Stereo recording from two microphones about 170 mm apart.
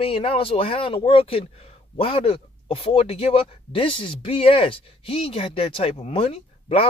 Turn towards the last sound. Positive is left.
turn(degrees=35)  # may be behind; listen again after turning